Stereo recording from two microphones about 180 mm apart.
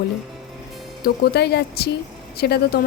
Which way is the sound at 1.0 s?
60° left (ahead or behind).